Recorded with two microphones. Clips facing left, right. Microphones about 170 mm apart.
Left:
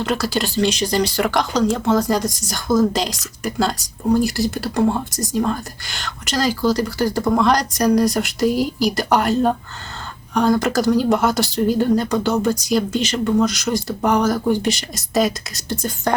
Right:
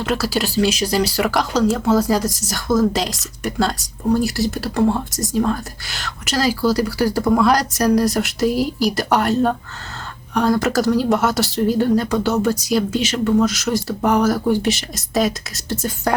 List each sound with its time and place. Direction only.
0.0 s speech: 5° right (ahead or behind)